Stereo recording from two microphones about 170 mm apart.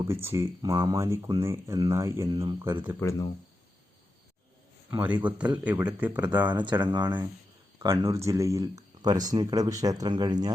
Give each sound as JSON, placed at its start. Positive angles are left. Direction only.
{"t": 0.0, "sound": "speech", "side_deg": -15}
{"t": 3.0, "sound": "speech", "side_deg": 15}
{"t": 5.0, "sound": "speech", "side_deg": -25}
{"t": 5.6, "sound": "speech", "side_deg": -10}
{"t": 6.5, "sound": "speech", "side_deg": -25}